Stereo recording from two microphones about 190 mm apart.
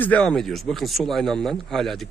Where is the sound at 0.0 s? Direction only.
5° left (ahead or behind).